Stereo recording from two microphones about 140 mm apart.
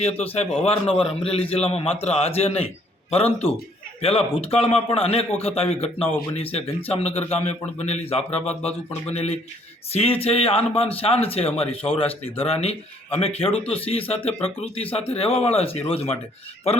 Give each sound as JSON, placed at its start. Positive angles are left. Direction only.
{"t": 0.2, "sound": "a man's voice", "side_deg": 50}